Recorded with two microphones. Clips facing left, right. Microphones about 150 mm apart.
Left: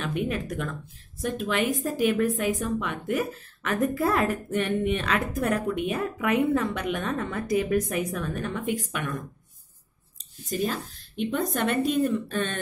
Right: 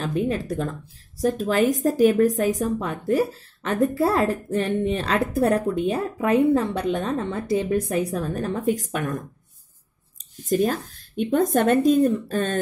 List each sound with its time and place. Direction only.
0.0 s a woman's voice: 30° right (ahead or behind)
10.4 s speech: 50° right (ahead or behind)